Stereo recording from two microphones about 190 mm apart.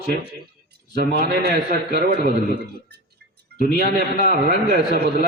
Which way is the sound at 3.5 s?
55° right (ahead or behind).